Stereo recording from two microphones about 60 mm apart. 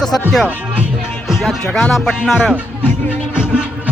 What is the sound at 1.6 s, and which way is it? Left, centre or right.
Speech, centre.